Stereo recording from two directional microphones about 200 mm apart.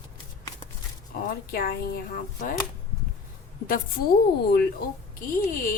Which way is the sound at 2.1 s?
45° left (ahead or behind).